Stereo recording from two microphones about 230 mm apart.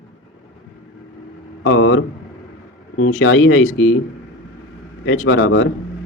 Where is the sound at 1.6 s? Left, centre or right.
Left.